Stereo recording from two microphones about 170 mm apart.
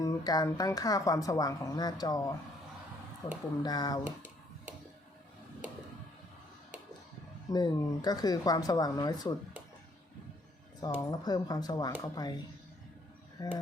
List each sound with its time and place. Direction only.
0.0 s speech: 20° left (ahead or behind)
3.6 s speech: 25° left (ahead or behind)
7.5 s speech: 25° left (ahead or behind)
10.8 s speech: 20° left (ahead or behind)